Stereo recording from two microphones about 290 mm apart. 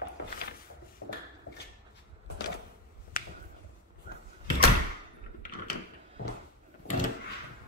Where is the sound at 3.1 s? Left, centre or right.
Left.